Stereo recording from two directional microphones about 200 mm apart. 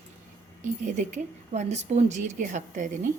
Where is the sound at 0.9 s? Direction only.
35° right (ahead or behind).